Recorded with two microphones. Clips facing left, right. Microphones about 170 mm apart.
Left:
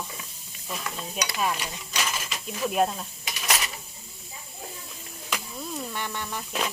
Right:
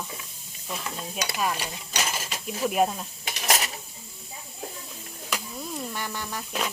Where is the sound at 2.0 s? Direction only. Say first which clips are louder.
Right 1 dB; 35° right (ahead or behind).